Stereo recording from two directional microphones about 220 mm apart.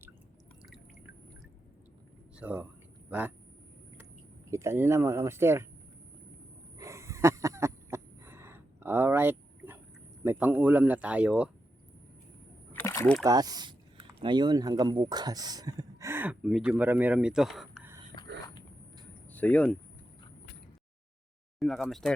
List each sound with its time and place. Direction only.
2.4 s speech: 5° right (ahead or behind)
4.5 s speech: 10° right (ahead or behind)
6.7 s a sound: 15° right (ahead or behind)
10.2 s speech: 10° right (ahead or behind)
12.7 s a sound: 10° left (ahead or behind)
13.2 s speech: 15° right (ahead or behind); by 17.9 s centre (ahead or behind)
19.3 s speech: 5° left (ahead or behind)
21.6 s speech: centre (ahead or behind)